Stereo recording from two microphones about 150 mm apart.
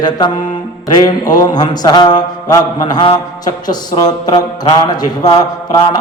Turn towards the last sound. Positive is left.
turn(degrees=25)  # may be behind; listen again after turning